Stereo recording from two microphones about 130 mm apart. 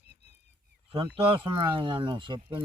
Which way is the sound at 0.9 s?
40° right (ahead or behind).